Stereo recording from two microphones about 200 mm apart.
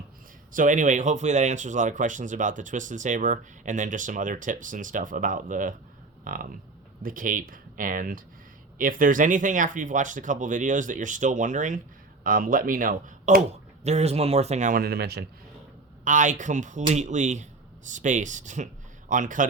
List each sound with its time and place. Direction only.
0.5 s speech: 40° right (ahead or behind)
16.0 s speech: 40° right (ahead or behind)